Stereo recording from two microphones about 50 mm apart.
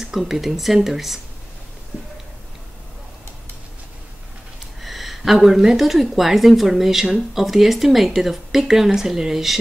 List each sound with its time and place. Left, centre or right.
0.0 s a woman's voice: centre
4.8 s a woman's voice: centre